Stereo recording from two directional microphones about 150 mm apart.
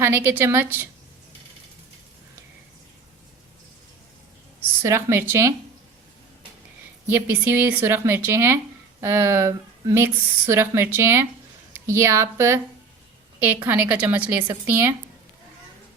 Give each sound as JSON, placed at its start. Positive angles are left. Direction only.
{"t": 0.0, "sound": "speech", "side_deg": -15}
{"t": 4.8, "sound": "speech", "side_deg": -20}
{"t": 7.1, "sound": "a woman's voice", "side_deg": -15}